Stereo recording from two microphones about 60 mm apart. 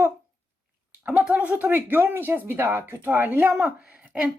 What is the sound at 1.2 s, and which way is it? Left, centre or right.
A woman's voice, right.